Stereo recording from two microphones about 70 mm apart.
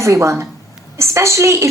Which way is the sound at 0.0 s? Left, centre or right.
Right.